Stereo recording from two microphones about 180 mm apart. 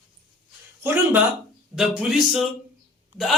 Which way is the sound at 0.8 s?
10° right (ahead or behind).